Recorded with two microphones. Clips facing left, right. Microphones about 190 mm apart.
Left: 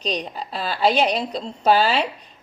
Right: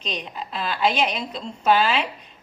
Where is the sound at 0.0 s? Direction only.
35° left (ahead or behind).